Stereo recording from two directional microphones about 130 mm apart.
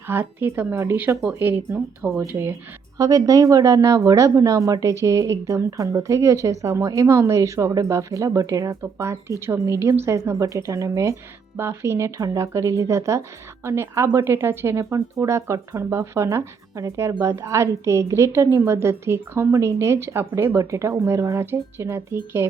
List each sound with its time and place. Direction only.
0.1 s speech: 15° right (ahead or behind)